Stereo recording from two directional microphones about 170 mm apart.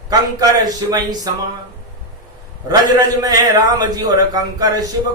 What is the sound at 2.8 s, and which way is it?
A man's voice, 20° right (ahead or behind).